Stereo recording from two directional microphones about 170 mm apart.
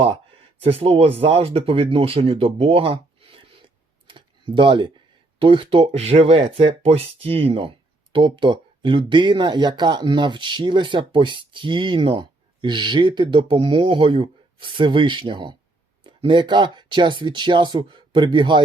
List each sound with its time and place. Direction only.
0.6 s speech: 35° right (ahead or behind)